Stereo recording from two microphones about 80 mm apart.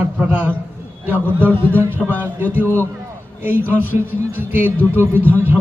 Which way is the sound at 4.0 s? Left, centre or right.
Right.